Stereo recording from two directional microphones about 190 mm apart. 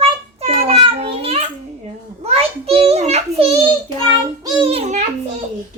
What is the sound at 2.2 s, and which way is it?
A child's voice, 35° right (ahead or behind).